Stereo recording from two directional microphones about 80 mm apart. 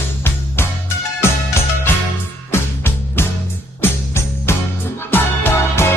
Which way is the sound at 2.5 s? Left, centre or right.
Left.